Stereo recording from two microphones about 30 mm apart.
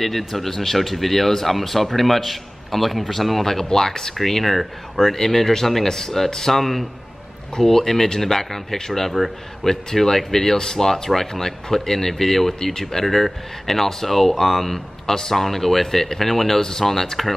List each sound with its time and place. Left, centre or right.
0.3 s speech: centre
4.1 s speech: centre
5.1 s speech: centre
6.6 s speech: centre
7.5 s speech: centre